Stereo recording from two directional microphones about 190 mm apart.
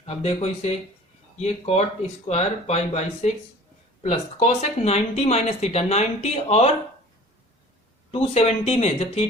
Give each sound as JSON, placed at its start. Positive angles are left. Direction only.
{"t": 0.0, "sound": "speech", "side_deg": 35}
{"t": 8.1, "sound": "speech", "side_deg": 30}